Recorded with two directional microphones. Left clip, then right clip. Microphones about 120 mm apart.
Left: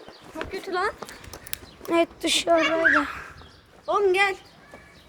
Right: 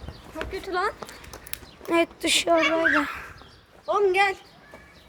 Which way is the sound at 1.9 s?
10° right (ahead or behind).